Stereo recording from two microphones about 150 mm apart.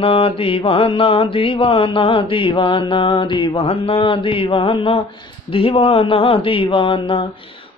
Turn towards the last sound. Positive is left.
turn(degrees=35)  # may be behind; listen again after turning